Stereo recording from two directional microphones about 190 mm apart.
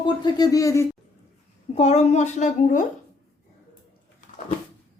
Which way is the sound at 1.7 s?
35° left (ahead or behind).